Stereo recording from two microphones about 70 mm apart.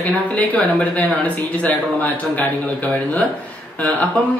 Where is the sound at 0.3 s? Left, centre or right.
Left.